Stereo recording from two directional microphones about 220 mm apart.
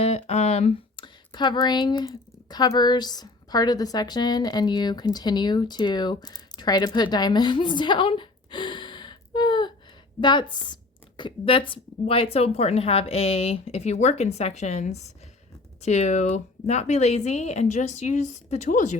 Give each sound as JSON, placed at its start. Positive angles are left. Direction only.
{"t": 0.0, "sound": "a woman's voice", "side_deg": 30}